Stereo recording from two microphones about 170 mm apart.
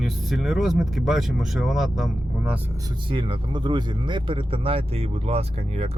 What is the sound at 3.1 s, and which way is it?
Speech, 30° right (ahead or behind).